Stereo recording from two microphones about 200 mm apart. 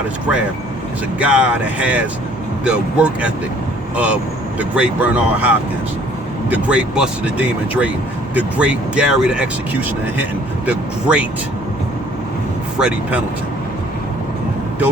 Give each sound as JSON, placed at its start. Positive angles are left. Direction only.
{"t": 1.2, "sound": "speech", "side_deg": -5}
{"t": 10.7, "sound": "speech", "side_deg": -5}
{"t": 12.8, "sound": "speech", "side_deg": -5}